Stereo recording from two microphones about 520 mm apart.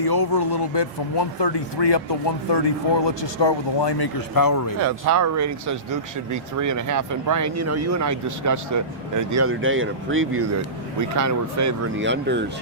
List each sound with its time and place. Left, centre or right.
0.0 s speech: left
4.8 s speech: right
11.9 s speech: right